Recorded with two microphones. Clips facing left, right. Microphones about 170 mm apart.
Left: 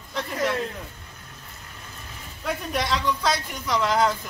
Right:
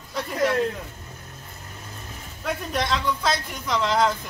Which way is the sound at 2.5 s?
Centre (ahead or behind).